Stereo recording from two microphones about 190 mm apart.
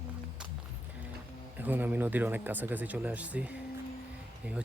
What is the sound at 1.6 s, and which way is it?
Speech, 10° right (ahead or behind).